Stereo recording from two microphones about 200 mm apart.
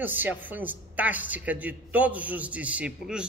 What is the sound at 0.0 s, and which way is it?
Speech, 10° right (ahead or behind).